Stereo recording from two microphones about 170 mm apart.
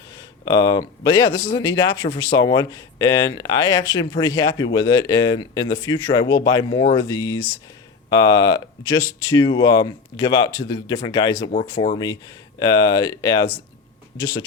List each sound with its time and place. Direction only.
0.4 s speech: 25° left (ahead or behind)